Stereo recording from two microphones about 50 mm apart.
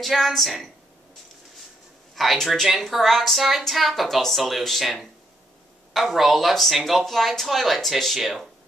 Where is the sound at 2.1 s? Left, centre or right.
Centre.